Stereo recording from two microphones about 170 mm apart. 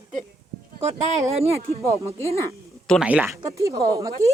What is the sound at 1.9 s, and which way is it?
Speech, 15° right (ahead or behind).